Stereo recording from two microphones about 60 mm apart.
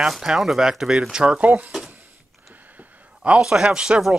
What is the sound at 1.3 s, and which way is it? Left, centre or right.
A man's voice, right.